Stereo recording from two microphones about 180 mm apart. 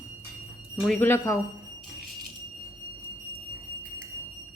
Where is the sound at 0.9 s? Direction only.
15° left (ahead or behind).